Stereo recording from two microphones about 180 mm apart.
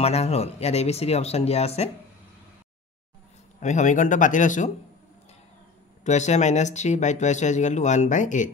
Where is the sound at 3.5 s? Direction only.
40° left (ahead or behind).